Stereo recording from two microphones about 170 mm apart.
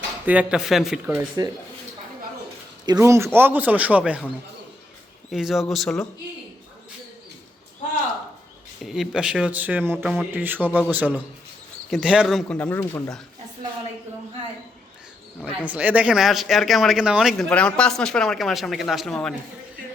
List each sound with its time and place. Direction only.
0.3 s speech: 5° right (ahead or behind)
1.4 s speech: 20° right (ahead or behind)
2.8 s speech: 20° right (ahead or behind)
5.3 s speech: centre (ahead or behind)
8.8 s speech: centre (ahead or behind)
12.5 s speech: 10° left (ahead or behind)
15.6 s speech: 10° right (ahead or behind)